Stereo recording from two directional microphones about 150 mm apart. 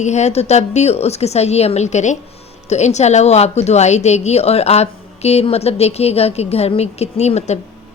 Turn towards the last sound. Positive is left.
turn(degrees=45)  # may be behind; listen again after turning